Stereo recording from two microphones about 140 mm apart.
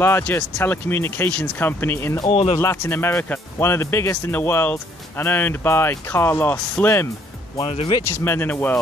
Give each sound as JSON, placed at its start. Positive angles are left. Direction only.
{"t": 0.0, "sound": "speech", "side_deg": 15}
{"t": 2.3, "sound": "speech", "side_deg": 45}
{"t": 2.6, "sound": "speech", "side_deg": 15}
{"t": 7.6, "sound": "speech", "side_deg": 40}
{"t": 8.2, "sound": "speech", "side_deg": 15}